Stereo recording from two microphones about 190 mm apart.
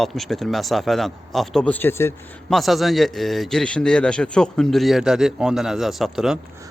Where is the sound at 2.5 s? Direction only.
Centre (ahead or behind).